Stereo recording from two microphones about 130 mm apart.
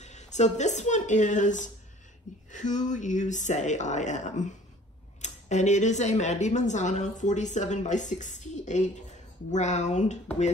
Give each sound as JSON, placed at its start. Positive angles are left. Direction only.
{"t": 0.0, "sound": "speech", "side_deg": 60}